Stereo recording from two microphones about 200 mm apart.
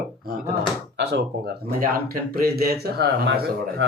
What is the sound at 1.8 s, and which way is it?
Speech, 45° right (ahead or behind).